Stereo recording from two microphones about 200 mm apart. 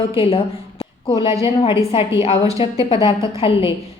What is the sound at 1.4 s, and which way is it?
Speech, 25° left (ahead or behind).